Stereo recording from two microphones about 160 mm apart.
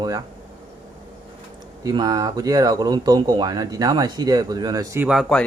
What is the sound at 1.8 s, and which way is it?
Speech, 25° right (ahead or behind).